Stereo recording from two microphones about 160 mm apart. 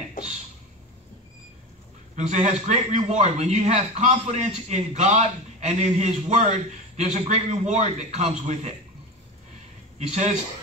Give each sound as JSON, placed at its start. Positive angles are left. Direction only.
{"t": 2.1, "sound": "a man's voice", "side_deg": -45}
{"t": 9.9, "sound": "a man's voice", "side_deg": -45}